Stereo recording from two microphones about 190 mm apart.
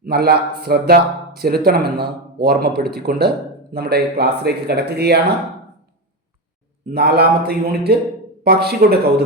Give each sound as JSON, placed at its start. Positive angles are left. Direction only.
{"t": 0.0, "sound": "speech", "side_deg": -55}
{"t": 6.9, "sound": "speech", "side_deg": -55}